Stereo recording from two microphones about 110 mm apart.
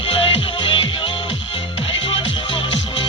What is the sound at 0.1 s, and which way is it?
Music, 60° left (ahead or behind).